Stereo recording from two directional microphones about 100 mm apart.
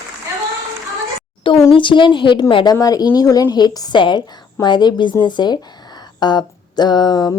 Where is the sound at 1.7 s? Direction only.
55° left (ahead or behind).